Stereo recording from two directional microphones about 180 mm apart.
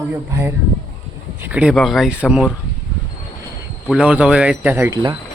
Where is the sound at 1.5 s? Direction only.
5° right (ahead or behind).